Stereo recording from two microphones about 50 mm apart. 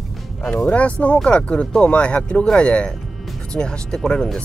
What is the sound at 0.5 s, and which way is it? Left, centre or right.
Speech, left.